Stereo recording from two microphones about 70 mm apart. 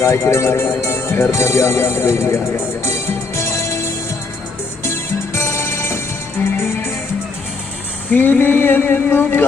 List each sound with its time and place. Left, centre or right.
0.0 s speech: left
2.8 s music: left
8.1 s speech: left